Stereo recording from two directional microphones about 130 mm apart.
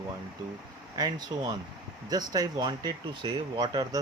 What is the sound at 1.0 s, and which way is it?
Speech, 30° right (ahead or behind).